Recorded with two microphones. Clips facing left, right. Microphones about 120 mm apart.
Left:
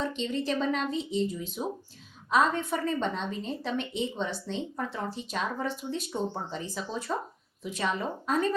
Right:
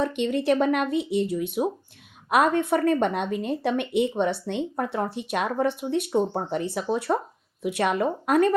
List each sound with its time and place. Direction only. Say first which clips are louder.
0.0 s speech: right 7 dB; 60° right (ahead or behind)